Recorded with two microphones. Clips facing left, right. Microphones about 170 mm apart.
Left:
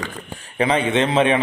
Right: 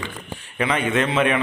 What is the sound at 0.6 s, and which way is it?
Speech, 30° left (ahead or behind).